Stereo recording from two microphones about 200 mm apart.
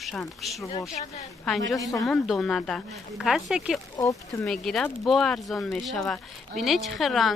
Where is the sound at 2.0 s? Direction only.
Centre (ahead or behind).